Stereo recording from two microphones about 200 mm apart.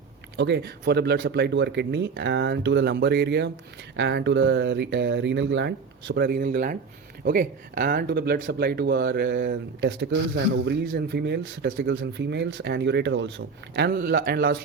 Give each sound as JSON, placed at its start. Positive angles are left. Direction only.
{"t": 0.3, "sound": "speech", "side_deg": -55}